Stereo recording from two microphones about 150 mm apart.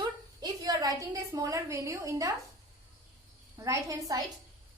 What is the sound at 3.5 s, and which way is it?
Speech, 20° right (ahead or behind).